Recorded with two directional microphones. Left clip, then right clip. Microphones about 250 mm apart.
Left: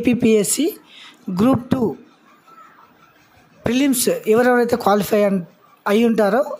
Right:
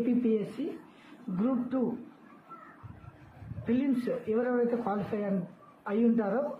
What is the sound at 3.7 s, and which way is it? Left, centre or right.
Speech, left.